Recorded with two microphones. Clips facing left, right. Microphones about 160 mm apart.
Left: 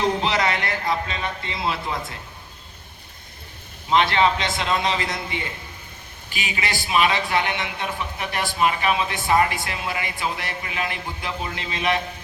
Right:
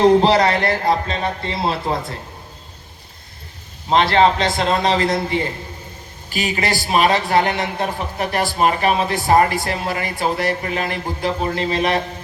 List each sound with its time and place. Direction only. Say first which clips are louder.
0.0 s a man's voice: right 9 dB; 40° right (ahead or behind)
3.8 s a man's voice: right 4 dB; 40° right (ahead or behind)